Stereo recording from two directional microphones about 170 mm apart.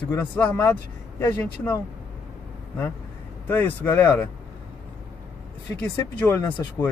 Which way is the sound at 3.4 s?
10° left (ahead or behind).